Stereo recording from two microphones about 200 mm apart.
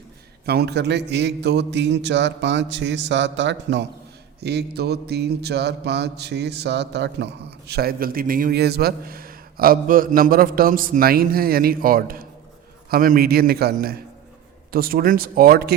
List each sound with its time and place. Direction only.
0.4 s a man's voice: 55° right (ahead or behind)
4.4 s mantra: 55° right (ahead or behind)